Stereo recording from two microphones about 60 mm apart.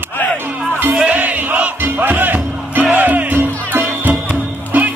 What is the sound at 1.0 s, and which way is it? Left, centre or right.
Music, right.